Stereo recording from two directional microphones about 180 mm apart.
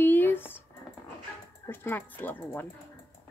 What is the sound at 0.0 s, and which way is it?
Squish, 10° left (ahead or behind).